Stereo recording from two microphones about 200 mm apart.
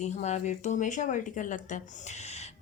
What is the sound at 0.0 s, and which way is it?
Speech, 35° left (ahead or behind).